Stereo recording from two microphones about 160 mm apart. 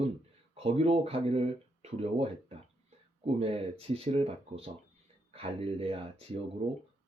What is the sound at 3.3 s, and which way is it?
Speech, 40° right (ahead or behind).